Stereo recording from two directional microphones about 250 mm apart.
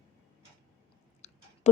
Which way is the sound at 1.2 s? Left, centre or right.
Left.